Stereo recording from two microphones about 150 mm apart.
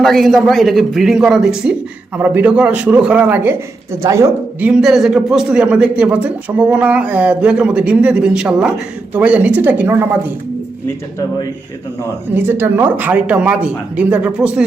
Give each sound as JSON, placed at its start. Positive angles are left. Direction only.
{"t": 0.0, "sound": "a man's voice", "side_deg": 0}
{"t": 4.7, "sound": "a man's voice", "side_deg": -5}
{"t": 12.3, "sound": "a man's voice", "side_deg": -15}